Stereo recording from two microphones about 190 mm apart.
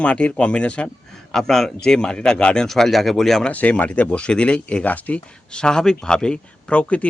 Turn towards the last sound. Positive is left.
turn(degrees=5)  # may be behind; listen again after turning